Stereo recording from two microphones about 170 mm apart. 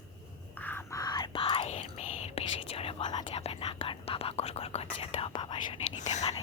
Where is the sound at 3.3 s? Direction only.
35° left (ahead or behind).